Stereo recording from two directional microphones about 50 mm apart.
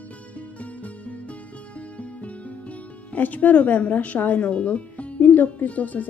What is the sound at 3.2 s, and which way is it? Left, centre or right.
Speech, left.